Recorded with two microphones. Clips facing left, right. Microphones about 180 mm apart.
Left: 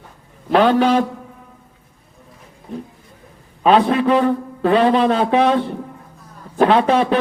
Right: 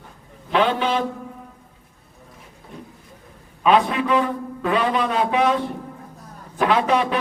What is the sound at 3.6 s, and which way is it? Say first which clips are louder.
Speech: left 4 dB; 35° left (ahead or behind).